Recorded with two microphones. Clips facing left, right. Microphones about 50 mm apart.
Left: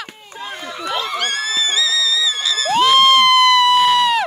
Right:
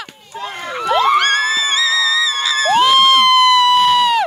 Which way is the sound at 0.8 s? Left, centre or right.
Right.